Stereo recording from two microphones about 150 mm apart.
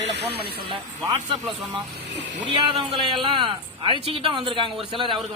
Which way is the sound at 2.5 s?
35° right (ahead or behind).